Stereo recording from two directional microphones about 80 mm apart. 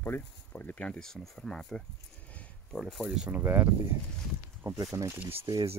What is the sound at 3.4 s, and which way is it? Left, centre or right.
Speech, right.